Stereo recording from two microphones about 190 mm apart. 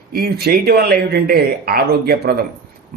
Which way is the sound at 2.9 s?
55° right (ahead or behind).